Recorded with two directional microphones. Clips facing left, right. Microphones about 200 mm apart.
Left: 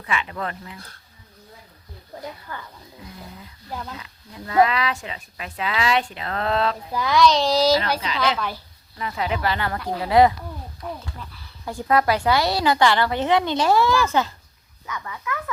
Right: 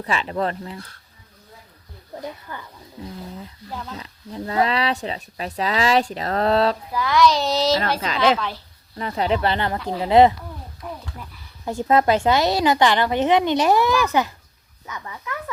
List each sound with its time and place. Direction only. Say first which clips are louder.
0.0 s speech: right 4 dB; 35° right (ahead or behind)
2.5 s speech: even; 15° right (ahead or behind)
3.9 s speech: right 7 dB; 35° right (ahead or behind)
6.9 s a child's voice: even; 20° left (ahead or behind)
7.2 s speech: left 1 dB; 5° right (ahead or behind)
9.0 s a woman's voice: right 4 dB; 35° right (ahead or behind)
10.8 s speech: left 1 dB; 5° right (ahead or behind)
11.6 s a woman's voice: right 2 dB; 25° right (ahead or behind)